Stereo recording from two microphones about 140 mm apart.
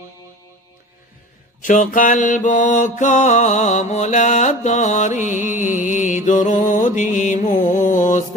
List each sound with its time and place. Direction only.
1.6 s mantra: 70° left (ahead or behind)